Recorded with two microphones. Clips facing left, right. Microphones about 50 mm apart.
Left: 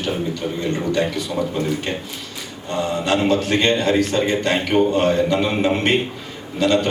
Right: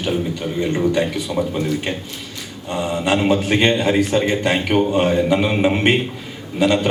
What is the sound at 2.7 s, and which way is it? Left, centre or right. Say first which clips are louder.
A man's voice: right 1 dB; centre.